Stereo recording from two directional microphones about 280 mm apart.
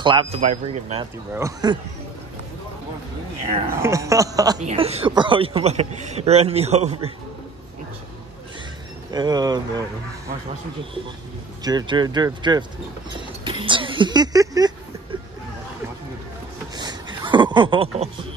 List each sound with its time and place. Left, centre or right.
0.0 s a man's voice: centre
1.3 s speech: centre
3.7 s speech: centre
4.6 s a man's voice: right
9.1 s speech: centre
11.6 s speech: centre
16.7 s a sound: centre